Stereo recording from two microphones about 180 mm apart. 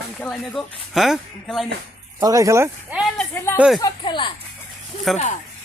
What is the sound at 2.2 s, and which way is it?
Speech, 20° right (ahead or behind).